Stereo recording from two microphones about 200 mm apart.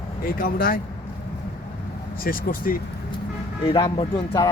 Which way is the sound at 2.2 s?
45° left (ahead or behind).